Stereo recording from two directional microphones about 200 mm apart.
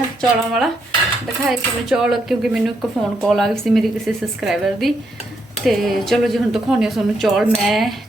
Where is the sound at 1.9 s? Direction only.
Centre (ahead or behind).